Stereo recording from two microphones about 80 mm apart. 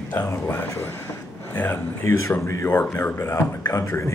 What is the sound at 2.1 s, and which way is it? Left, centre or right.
Speech, left.